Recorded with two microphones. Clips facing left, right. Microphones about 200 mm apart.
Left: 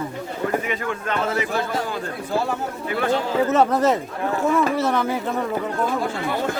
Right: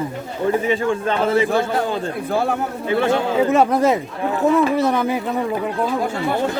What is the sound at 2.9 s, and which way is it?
Speech, 25° right (ahead or behind).